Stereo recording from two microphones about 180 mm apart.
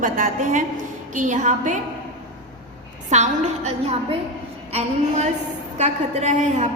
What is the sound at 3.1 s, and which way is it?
A woman's voice, 40° right (ahead or behind).